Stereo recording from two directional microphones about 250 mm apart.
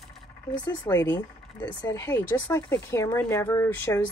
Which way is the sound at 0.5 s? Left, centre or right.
Centre.